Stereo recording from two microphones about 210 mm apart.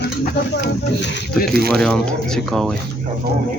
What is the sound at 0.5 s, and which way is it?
Speech, 55° left (ahead or behind).